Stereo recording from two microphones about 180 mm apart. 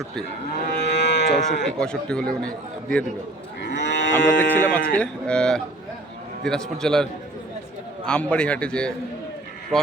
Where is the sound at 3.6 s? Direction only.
75° left (ahead or behind).